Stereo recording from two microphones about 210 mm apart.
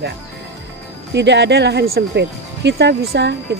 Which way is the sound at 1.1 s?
55° right (ahead or behind).